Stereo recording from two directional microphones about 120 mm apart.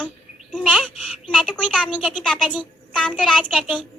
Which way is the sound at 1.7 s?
5° left (ahead or behind).